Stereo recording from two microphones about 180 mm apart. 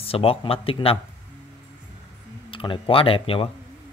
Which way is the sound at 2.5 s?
30° left (ahead or behind).